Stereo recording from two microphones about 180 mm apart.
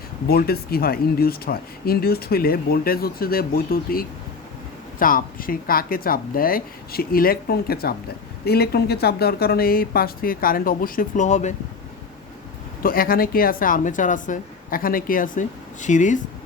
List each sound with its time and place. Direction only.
0.3 s speech: 60° left (ahead or behind); by 11.5 s 40° left (ahead or behind)
12.8 s speech: 55° left (ahead or behind)